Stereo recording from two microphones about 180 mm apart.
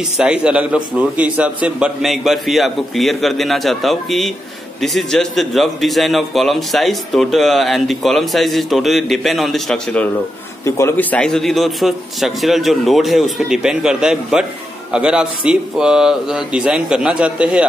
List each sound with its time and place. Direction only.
0.2 s a man's voice: 5° right (ahead or behind)
10.6 s a man's voice: 15° left (ahead or behind); by 17.6 s 5° right (ahead or behind)